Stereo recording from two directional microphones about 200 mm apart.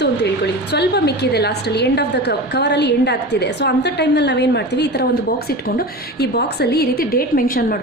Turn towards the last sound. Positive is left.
turn(degrees=45)  # may be behind; listen again after turning